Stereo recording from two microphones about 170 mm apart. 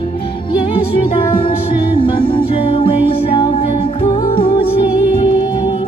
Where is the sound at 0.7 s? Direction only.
30° left (ahead or behind).